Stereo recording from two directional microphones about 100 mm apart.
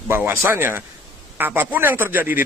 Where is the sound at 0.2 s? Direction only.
20° right (ahead or behind).